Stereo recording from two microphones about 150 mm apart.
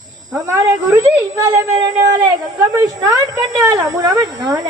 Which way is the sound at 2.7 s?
25° right (ahead or behind).